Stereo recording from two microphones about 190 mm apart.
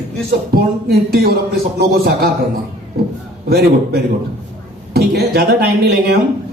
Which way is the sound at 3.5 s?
55° right (ahead or behind).